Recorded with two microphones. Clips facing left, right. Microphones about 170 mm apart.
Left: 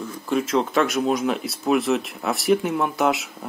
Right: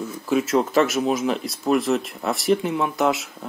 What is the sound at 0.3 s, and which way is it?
Speech, 5° right (ahead or behind).